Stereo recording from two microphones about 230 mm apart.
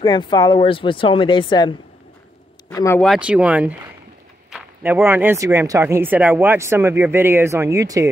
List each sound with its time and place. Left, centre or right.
0.0 s speech: centre
3.0 s a man's voice: centre